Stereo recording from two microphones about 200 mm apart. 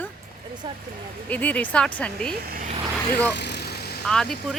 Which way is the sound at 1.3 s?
5° left (ahead or behind).